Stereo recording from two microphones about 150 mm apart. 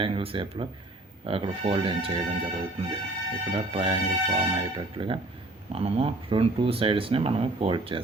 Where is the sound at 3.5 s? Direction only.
35° right (ahead or behind).